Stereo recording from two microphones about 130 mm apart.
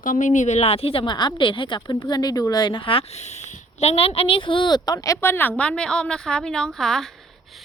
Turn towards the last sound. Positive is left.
turn(degrees=5)  # may be behind; listen again after turning